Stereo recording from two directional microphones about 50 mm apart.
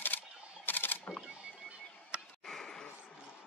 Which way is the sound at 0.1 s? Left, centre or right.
Left.